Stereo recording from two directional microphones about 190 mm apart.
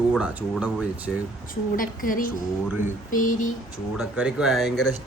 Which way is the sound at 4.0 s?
5° right (ahead or behind).